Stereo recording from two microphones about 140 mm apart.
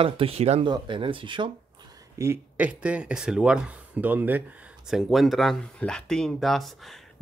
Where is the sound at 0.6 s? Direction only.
35° right (ahead or behind).